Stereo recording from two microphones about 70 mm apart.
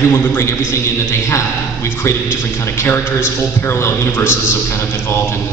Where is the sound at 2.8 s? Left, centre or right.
Left.